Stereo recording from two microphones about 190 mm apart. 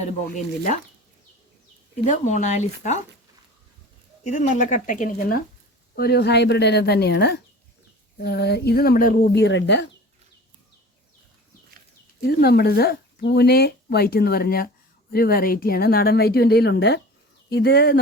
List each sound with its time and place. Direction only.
0.0 s a woman's voice: 45° left (ahead or behind)
2.0 s speech: 40° left (ahead or behind)
4.2 s a woman's voice: 40° left (ahead or behind); by 9.8 s 70° left (ahead or behind)
12.2 s a woman's voice: 55° left (ahead or behind)